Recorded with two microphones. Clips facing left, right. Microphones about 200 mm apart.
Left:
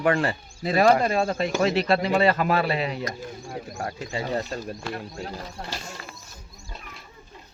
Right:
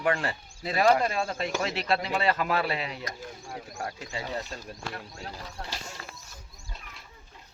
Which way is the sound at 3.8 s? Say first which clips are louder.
Left 5 dB; 60° left (ahead or behind).